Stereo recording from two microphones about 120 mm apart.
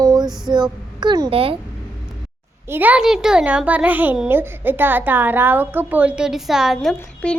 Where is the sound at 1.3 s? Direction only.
50° right (ahead or behind).